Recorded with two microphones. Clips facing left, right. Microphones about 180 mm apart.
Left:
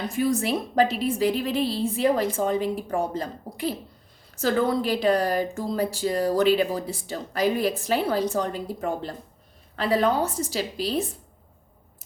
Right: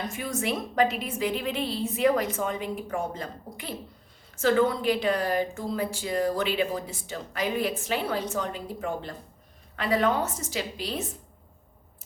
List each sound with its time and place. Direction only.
0.1 s a woman's voice: 35° left (ahead or behind)